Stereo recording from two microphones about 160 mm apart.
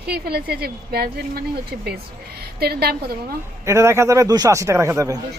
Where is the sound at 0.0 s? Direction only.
85° right.